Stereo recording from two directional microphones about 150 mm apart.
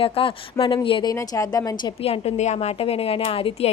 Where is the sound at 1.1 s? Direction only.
20° left (ahead or behind).